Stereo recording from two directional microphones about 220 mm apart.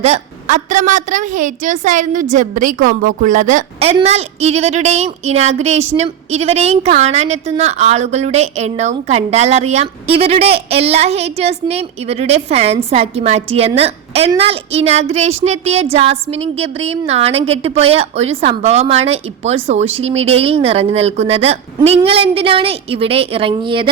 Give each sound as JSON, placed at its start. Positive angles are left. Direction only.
{"t": 0.0, "sound": "a woman's voice", "side_deg": -35}